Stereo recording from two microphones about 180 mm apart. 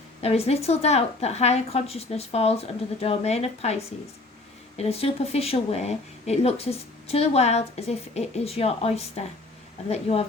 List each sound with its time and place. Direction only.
0.2 s speech: 35° left (ahead or behind)
4.8 s speech: 35° left (ahead or behind)